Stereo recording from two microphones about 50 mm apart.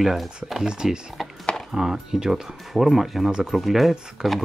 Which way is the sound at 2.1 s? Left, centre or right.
Centre.